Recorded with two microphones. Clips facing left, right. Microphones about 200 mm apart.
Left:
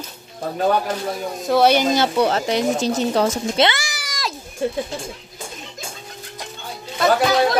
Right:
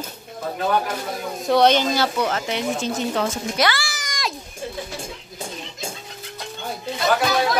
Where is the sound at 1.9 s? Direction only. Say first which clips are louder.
Left 4 dB; 25° left (ahead or behind).